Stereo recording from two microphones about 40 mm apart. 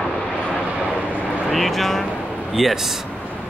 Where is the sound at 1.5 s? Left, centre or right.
Centre.